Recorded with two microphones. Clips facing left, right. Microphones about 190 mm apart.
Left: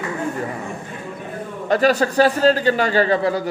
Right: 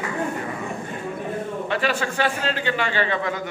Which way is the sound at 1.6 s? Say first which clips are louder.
Left 10 dB; 40° left (ahead or behind).